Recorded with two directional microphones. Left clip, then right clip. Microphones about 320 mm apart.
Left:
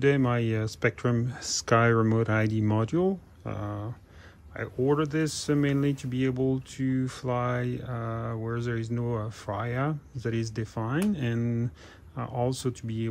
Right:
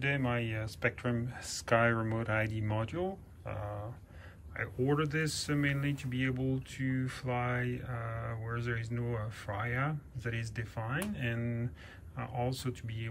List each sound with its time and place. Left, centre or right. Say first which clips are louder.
0.0 s speech: left 8 dB; centre
4.6 s speech: left 6 dB; centre